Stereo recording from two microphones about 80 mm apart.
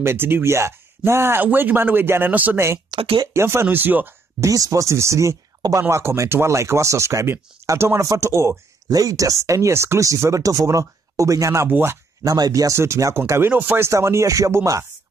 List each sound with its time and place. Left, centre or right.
0.0 s speech: right
2.9 s speech: right
3.3 s speech: right
4.4 s speech: right
8.8 s speech: right
11.7 s speech: right
12.2 s speech: right
13.5 s speech: right
13.8 s speech: right